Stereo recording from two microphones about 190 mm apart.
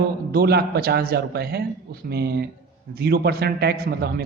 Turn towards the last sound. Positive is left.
turn(degrees=-55)  # may be behind; listen again after turning